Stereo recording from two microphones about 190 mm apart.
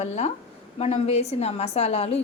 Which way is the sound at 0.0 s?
35° left (ahead or behind).